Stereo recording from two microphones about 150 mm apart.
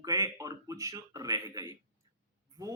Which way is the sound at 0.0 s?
20° right (ahead or behind).